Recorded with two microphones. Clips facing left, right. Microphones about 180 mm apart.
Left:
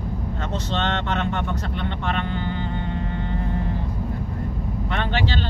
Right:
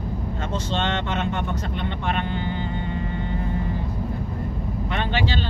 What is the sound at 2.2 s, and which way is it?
Vehicle, 55° left (ahead or behind).